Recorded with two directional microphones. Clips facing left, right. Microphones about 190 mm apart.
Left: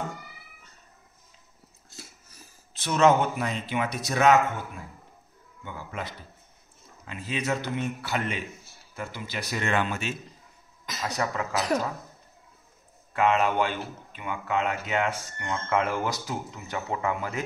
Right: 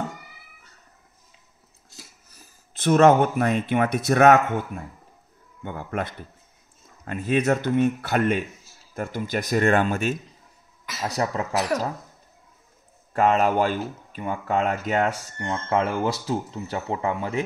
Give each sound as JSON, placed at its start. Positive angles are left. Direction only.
{"t": 2.7, "sound": "speech", "side_deg": -50}
{"t": 11.0, "sound": "speech", "side_deg": -35}
{"t": 13.1, "sound": "speech", "side_deg": -40}